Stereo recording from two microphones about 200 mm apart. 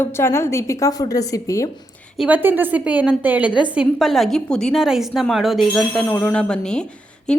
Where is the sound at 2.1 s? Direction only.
5° right (ahead or behind).